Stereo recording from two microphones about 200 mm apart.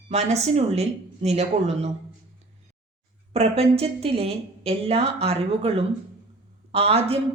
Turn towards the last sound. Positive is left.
turn(degrees=-30)  # may be behind; listen again after turning